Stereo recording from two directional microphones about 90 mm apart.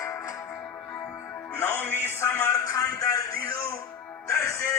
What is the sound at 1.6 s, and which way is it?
Music, 25° left (ahead or behind).